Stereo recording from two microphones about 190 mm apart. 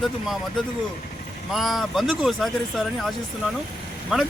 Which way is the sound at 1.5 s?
Centre (ahead or behind).